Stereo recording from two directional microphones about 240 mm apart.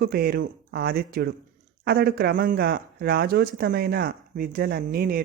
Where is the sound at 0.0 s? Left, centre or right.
Right.